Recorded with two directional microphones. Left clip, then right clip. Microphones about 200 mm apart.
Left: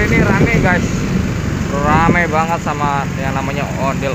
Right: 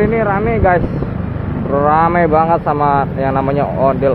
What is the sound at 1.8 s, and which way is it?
Speech, 40° right (ahead or behind).